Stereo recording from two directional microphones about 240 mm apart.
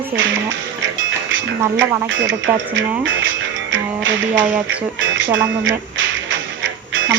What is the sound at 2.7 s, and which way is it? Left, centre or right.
Music, right.